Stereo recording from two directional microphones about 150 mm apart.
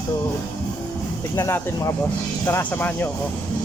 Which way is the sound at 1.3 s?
20° left (ahead or behind).